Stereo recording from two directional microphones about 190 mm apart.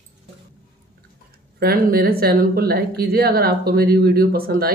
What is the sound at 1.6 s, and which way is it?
Speech, 50° right (ahead or behind).